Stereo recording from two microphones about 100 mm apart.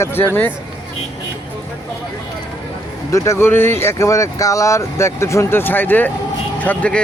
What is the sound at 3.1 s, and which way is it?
Speech, 30° left (ahead or behind).